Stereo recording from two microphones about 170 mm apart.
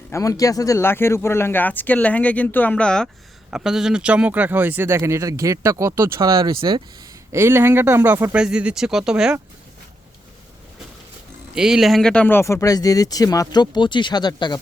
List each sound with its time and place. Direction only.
0.1 s speech: 20° left (ahead or behind); by 6.8 s 30° right (ahead or behind)
7.3 s speech: 15° right (ahead or behind)
11.5 s speech: 5° right (ahead or behind); by 14.6 s 25° left (ahead or behind)